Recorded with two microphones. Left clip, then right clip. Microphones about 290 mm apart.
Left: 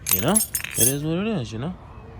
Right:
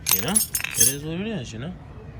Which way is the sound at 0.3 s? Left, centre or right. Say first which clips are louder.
Left 3 dB; centre.